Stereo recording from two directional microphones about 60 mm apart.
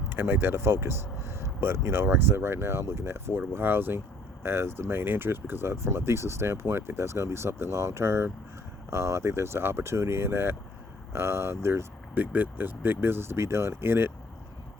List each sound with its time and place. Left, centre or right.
0.1 s speech: right
12.1 s speech: right